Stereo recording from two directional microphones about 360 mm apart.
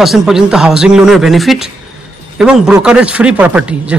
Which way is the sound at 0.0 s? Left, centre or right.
Centre.